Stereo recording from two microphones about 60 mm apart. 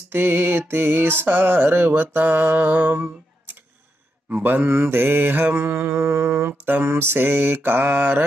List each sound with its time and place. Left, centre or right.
0.1 s mantra: right